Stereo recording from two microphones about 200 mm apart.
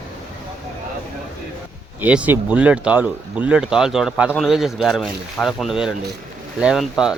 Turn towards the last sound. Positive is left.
turn(degrees=-5)  # may be behind; listen again after turning